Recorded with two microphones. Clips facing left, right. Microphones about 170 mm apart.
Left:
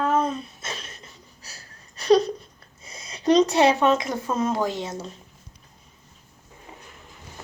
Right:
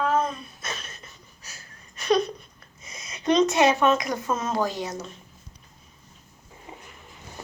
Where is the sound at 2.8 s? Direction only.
30° left (ahead or behind).